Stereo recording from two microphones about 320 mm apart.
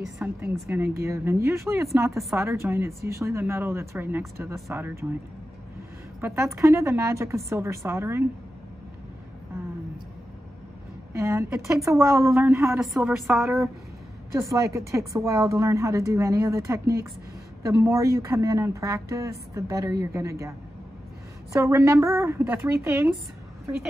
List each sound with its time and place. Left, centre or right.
0.0 s a woman's voice: centre
6.2 s a woman's voice: centre
11.1 s a woman's voice: centre
21.5 s a woman's voice: centre